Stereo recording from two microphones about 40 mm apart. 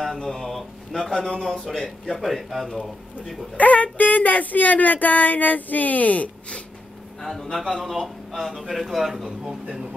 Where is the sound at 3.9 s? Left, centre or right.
Left.